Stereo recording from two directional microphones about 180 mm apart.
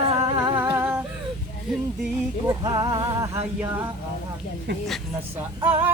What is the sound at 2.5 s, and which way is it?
Speech, 25° right (ahead or behind).